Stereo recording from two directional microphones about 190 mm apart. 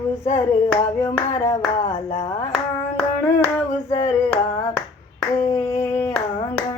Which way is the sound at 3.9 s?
15° left (ahead or behind).